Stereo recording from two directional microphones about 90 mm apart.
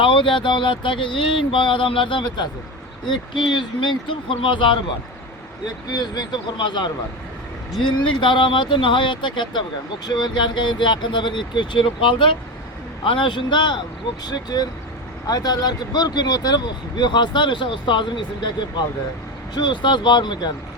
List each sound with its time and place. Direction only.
0.0 s a sound: 70° left (ahead or behind)
3.1 s speech: 60° left (ahead or behind)
5.9 s speech: 50° left (ahead or behind)
14.3 s speech: 45° left (ahead or behind)
19.5 s speech: 60° left (ahead or behind)